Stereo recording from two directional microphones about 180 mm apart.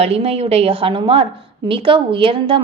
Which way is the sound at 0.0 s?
35° right (ahead or behind).